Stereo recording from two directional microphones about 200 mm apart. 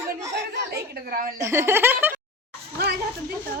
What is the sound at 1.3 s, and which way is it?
Speech, 15° right (ahead or behind).